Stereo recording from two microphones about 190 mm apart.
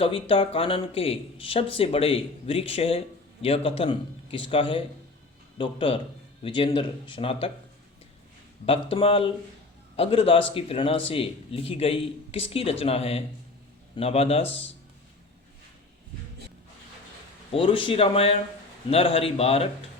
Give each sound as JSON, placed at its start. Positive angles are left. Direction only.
{"t": 0.0, "sound": "speech", "side_deg": 30}
{"t": 8.6, "sound": "speech", "side_deg": 30}
{"t": 17.5, "sound": "speech", "side_deg": 25}